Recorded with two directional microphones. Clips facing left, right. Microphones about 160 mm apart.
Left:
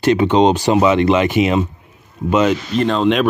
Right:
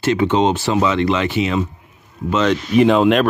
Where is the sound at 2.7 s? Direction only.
10° right (ahead or behind).